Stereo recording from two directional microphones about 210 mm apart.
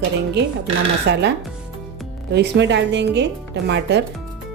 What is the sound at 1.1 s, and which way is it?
Speech, 55° right (ahead or behind).